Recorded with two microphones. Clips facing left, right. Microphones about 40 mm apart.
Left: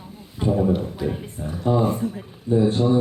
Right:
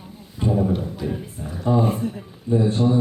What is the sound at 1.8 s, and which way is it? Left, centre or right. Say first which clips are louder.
Speech: even; right.